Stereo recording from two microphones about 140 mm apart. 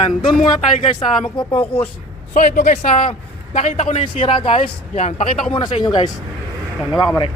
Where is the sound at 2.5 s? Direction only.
70° left (ahead or behind).